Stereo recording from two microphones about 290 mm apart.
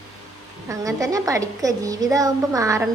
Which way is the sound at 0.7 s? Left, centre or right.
Centre.